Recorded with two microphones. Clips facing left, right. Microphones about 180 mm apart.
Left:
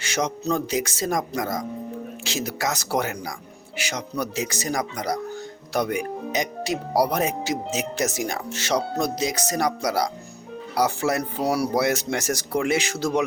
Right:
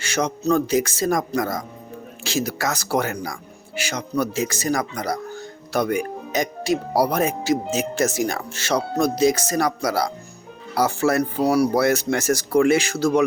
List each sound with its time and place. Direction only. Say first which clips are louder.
0.0 s speech: right 3 dB; 20° left (ahead or behind)